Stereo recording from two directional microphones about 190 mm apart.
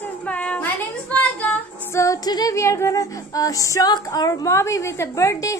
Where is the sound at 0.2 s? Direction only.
5° left (ahead or behind).